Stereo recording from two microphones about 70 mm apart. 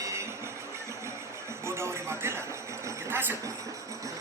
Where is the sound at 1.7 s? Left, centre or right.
Right.